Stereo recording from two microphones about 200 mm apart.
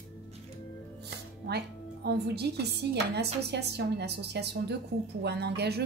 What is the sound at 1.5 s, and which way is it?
A woman's voice, 55° right (ahead or behind).